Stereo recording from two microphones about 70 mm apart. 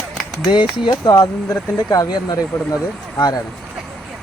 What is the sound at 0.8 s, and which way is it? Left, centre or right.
Speech, left.